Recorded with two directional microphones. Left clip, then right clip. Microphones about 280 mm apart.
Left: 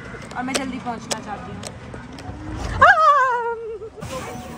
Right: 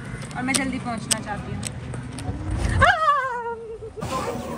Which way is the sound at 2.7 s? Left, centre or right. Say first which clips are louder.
Left 6 dB; left.